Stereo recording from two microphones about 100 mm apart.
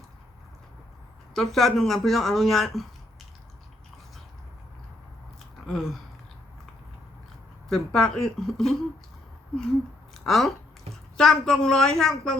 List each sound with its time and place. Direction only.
1.3 s speech: 5° left (ahead or behind)
5.6 s speech: centre (ahead or behind)
7.7 s speech: 5° left (ahead or behind)
10.2 s speech: centre (ahead or behind)
10.9 s a sound: 90° right
11.2 s speech: 5° left (ahead or behind)